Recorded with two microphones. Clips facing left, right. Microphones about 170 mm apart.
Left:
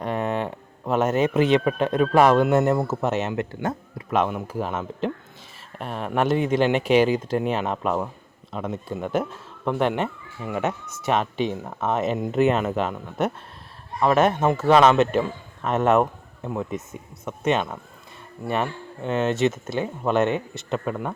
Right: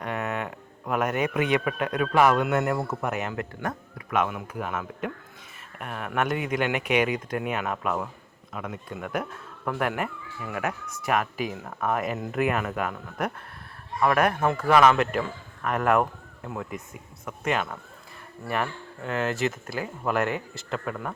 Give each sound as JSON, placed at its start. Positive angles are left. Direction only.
{"t": 0.0, "sound": "speech", "side_deg": 30}